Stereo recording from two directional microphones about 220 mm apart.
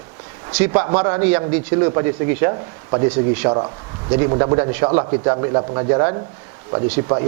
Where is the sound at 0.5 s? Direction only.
10° right (ahead or behind).